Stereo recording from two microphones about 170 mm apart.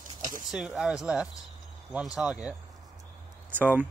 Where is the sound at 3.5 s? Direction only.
10° right (ahead or behind).